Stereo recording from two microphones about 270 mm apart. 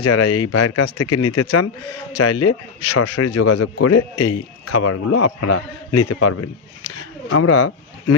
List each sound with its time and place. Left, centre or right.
0.0 s speech: left